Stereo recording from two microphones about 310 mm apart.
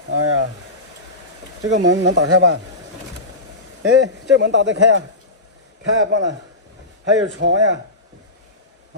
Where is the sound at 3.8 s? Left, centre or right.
Right.